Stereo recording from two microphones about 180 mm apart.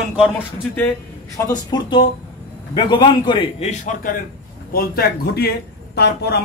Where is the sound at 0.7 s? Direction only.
5° left (ahead or behind).